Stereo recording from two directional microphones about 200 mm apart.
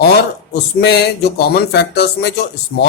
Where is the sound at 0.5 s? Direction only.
55° left (ahead or behind).